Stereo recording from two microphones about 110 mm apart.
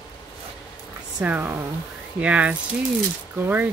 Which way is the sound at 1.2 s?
15° right (ahead or behind).